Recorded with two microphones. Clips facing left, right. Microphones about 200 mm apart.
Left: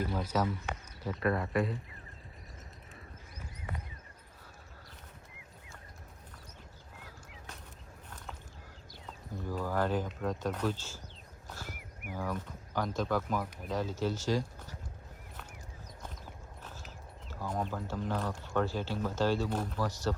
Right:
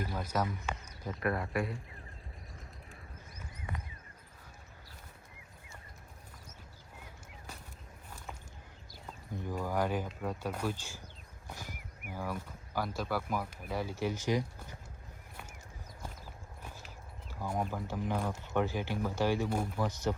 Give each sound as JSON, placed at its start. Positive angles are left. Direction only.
{"t": 0.1, "sound": "speech", "side_deg": -10}
{"t": 9.3, "sound": "speech", "side_deg": -20}
{"t": 11.4, "sound": "a sound", "side_deg": -15}
{"t": 12.1, "sound": "speech", "side_deg": -10}
{"t": 17.2, "sound": "speech", "side_deg": -10}